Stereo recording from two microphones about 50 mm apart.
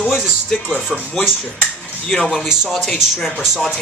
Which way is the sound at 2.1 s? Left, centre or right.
Centre.